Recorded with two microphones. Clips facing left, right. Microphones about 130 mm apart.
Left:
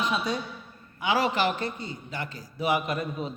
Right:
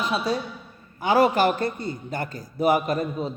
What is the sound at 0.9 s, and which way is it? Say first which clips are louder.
A man's voice: right 6 dB; 45° right (ahead or behind).